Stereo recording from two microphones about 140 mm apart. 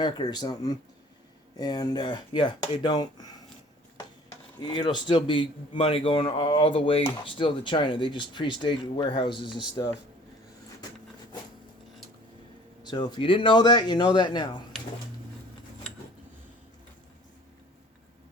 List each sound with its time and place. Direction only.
0.0 s a man's voice: 30° left (ahead or behind)
4.7 s a man's voice: 30° left (ahead or behind)
9.7 s speech: 20° left (ahead or behind)
12.8 s a man's voice: 30° left (ahead or behind)